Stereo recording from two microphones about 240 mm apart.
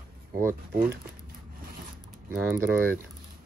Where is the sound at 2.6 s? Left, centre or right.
Centre.